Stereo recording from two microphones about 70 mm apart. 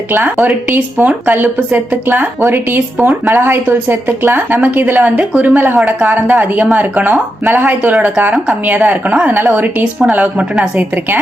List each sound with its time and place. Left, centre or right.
0.1 s a woman's voice: right